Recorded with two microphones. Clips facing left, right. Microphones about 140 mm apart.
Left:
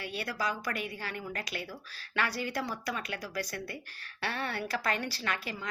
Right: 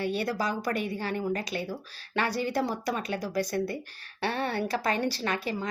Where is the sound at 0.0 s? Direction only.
30° right (ahead or behind).